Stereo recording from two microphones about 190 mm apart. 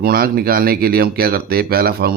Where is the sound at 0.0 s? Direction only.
50° right (ahead or behind).